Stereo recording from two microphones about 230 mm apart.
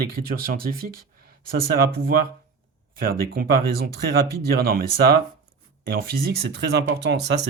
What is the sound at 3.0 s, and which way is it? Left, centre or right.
Speech, right.